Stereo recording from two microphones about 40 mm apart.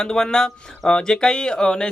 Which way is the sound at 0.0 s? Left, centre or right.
Centre.